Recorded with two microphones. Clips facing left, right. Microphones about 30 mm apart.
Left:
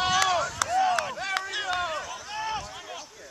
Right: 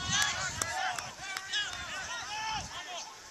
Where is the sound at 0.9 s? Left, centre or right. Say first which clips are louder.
Left 11 dB; left.